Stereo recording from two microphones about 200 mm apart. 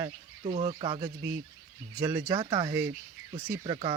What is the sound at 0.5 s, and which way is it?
Speech, 35° right (ahead or behind).